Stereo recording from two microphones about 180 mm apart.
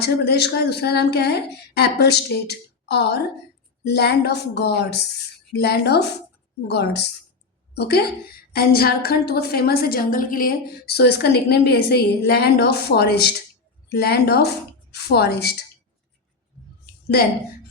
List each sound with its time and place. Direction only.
0.0 s a woman's voice: 65° left (ahead or behind)